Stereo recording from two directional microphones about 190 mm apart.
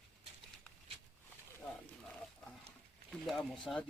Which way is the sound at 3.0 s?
Centre (ahead or behind).